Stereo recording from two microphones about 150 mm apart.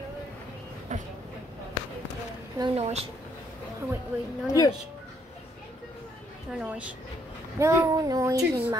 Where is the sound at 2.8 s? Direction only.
45° right (ahead or behind).